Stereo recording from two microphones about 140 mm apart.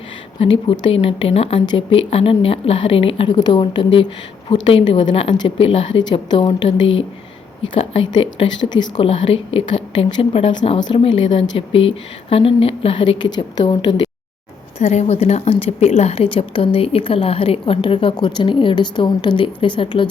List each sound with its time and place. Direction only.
0.3 s a woman's voice: 40° left (ahead or behind)
14.8 s a woman's voice: 50° left (ahead or behind); by 20.1 s 35° left (ahead or behind)